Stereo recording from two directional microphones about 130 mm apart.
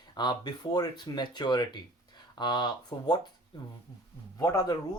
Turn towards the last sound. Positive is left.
turn(degrees=30)  # may be behind; listen again after turning